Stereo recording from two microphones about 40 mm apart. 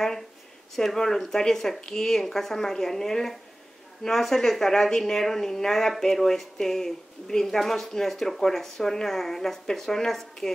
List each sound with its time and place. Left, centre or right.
0.7 s speech: centre